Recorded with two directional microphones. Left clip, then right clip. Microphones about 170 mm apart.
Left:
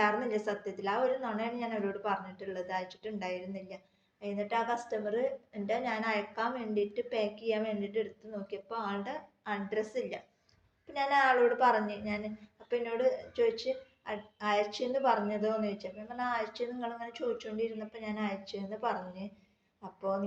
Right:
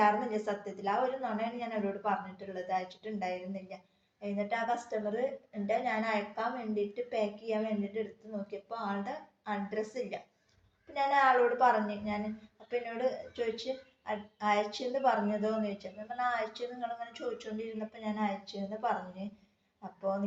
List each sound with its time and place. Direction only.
0.0 s a woman's voice: 25° left (ahead or behind)